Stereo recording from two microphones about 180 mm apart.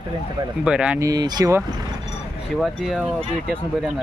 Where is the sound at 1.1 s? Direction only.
20° right (ahead or behind).